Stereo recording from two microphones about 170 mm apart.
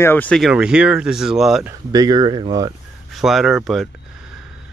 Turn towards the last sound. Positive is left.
turn(degrees=0)  # may be behind; listen again after turning